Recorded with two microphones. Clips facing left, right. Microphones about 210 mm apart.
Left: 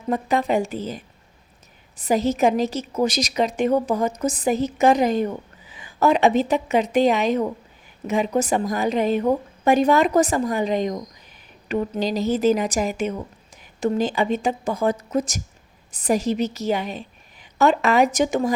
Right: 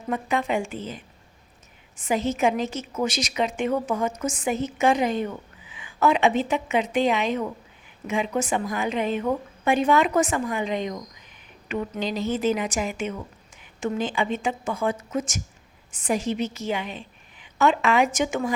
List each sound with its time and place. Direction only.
0.1 s a woman's voice: 40° left (ahead or behind)